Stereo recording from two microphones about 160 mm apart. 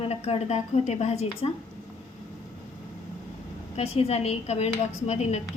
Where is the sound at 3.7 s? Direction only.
40° left (ahead or behind).